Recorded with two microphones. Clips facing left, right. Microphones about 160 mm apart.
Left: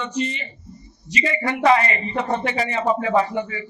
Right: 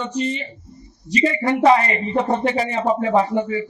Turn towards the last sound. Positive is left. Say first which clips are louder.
# right 3 dB
turn(degrees=-35)  # may be behind; listen again after turning